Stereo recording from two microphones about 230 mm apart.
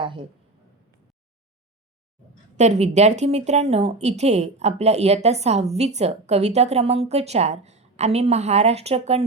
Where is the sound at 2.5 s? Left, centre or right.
Right.